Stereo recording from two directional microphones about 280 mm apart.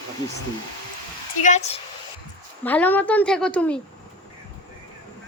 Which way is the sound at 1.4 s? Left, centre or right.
Left.